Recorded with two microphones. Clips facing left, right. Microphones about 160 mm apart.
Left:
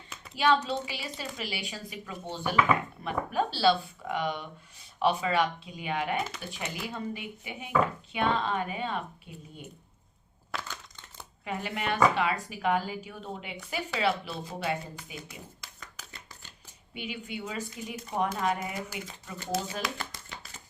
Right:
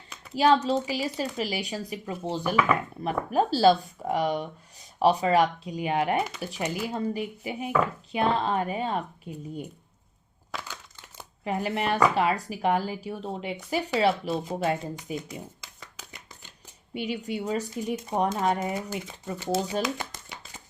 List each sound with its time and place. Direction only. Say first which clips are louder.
0.3 s speech: right 5 dB; 35° right (ahead or behind)
10.6 s crumpling: even; 10° right (ahead or behind)
11.4 s speech: right 5 dB; 35° right (ahead or behind)
16.0 s shuffling cards: right 2 dB; 15° right (ahead or behind)
16.9 s speech: right 7 dB; 40° right (ahead or behind); by 20.1 s 20° right (ahead or behind)